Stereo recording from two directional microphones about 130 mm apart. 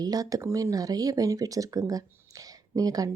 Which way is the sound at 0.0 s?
30° right (ahead or behind).